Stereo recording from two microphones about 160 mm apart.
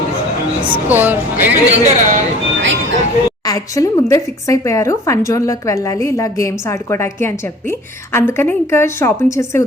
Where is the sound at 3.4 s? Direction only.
20° left (ahead or behind).